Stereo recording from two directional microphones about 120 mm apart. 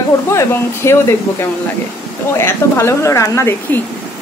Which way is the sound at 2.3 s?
20° left (ahead or behind).